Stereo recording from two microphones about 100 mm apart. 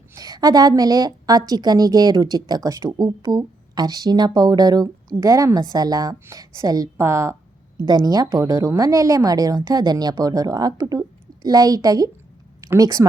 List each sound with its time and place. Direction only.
0.1 s a sound: 40° right (ahead or behind)
0.7 s a woman's voice: 40° right (ahead or behind)
7.8 s a woman's voice: 40° right (ahead or behind)